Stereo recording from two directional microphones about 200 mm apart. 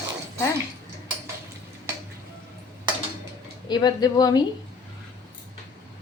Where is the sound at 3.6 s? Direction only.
20° left (ahead or behind).